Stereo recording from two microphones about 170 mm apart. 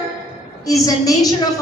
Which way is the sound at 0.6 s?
20° left (ahead or behind).